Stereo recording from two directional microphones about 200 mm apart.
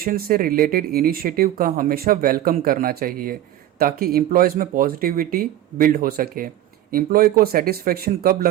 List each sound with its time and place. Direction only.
0.0 s speech: 45° right (ahead or behind)